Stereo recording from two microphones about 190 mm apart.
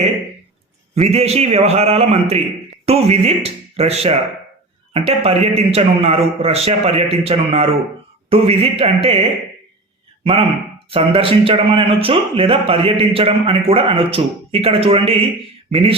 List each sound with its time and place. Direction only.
0.9 s a man's voice: 35° right (ahead or behind)
10.8 s speech: 30° right (ahead or behind)